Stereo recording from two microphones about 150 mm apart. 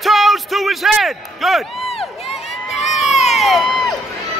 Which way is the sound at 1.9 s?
40° left (ahead or behind).